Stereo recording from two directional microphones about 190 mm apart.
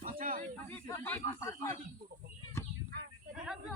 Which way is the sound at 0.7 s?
10° left (ahead or behind).